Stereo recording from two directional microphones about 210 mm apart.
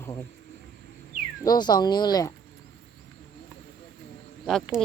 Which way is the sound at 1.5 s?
20° left (ahead or behind).